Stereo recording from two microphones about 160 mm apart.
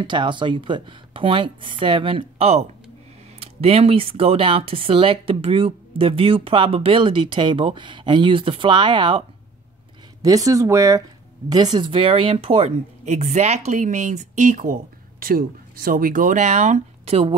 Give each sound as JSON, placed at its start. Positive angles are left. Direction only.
{"t": 0.0, "sound": "speech", "side_deg": -30}
{"t": 10.2, "sound": "speech", "side_deg": -20}